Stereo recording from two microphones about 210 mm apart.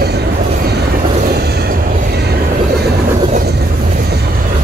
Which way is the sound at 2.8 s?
50° right (ahead or behind).